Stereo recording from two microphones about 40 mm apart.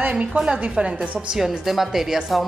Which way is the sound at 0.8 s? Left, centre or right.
Right.